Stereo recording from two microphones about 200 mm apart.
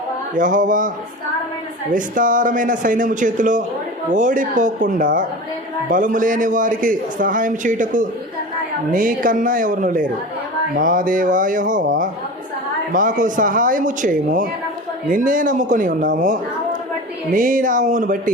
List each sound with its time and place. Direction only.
0.3 s a man's voice: 40° right (ahead or behind)